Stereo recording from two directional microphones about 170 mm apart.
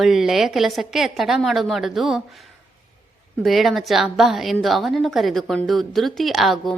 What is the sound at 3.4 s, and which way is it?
A woman's voice, centre (ahead or behind).